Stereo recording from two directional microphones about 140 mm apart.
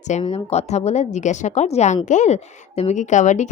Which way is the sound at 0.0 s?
50° left (ahead or behind).